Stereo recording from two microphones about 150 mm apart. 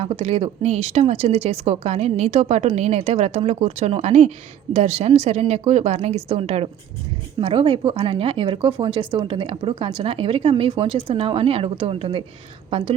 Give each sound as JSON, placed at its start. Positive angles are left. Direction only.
{"t": 0.0, "sound": "speech", "side_deg": -45}
{"t": 7.3, "sound": "speech", "side_deg": -35}